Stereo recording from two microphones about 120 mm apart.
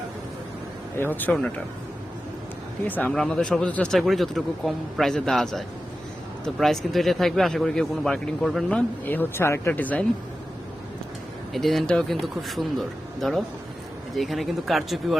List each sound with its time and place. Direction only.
0.9 s speech: 15° left (ahead or behind)
2.8 s speech: 15° left (ahead or behind)
9.0 s speech: 20° left (ahead or behind)
11.5 s speech: centre (ahead or behind)
14.2 s speech: centre (ahead or behind)